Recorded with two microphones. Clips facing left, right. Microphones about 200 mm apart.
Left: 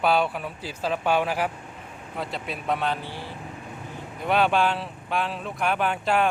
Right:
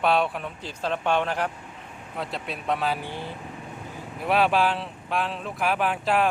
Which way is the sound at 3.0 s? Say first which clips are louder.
Right 2 dB; 20° right (ahead or behind).